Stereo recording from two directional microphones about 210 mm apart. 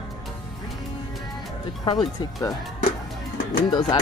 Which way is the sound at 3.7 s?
20° left (ahead or behind).